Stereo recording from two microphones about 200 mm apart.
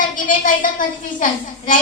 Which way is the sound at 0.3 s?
40° left (ahead or behind).